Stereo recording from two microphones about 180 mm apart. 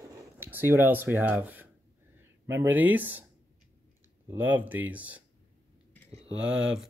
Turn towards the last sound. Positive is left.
turn(degrees=-5)  # may be behind; listen again after turning